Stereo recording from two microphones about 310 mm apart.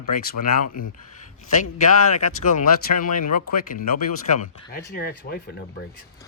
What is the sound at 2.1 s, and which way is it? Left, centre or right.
Speech, left.